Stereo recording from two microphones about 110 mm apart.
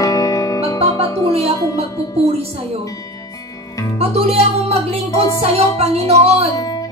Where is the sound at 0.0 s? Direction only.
30° left (ahead or behind).